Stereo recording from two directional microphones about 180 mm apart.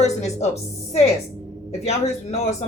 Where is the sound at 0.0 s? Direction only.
40° left (ahead or behind).